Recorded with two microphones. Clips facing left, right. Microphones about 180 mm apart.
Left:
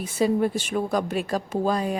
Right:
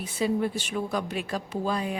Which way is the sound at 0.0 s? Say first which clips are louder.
Left 4 dB; 45° left (ahead or behind).